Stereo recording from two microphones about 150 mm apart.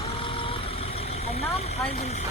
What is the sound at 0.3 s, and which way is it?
Vehicle, 35° left (ahead or behind).